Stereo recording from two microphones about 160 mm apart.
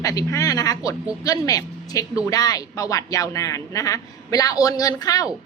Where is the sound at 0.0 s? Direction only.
20° left (ahead or behind).